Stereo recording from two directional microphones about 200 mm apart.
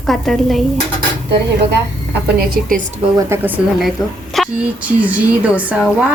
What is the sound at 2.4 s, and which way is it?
Speech, 45° right (ahead or behind).